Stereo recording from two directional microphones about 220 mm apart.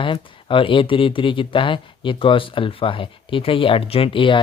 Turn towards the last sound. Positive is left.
turn(degrees=25)  # may be behind; listen again after turning